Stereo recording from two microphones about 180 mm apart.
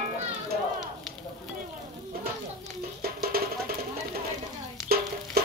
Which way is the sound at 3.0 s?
60° right (ahead or behind).